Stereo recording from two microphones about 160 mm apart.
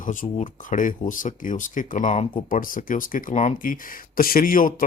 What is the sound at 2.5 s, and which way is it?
Speech, 60° left (ahead or behind).